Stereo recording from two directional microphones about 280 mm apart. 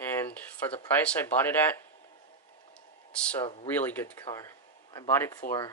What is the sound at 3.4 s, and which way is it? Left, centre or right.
Speech, left.